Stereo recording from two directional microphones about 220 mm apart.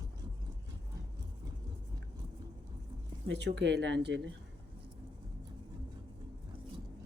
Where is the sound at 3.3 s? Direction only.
50° right (ahead or behind).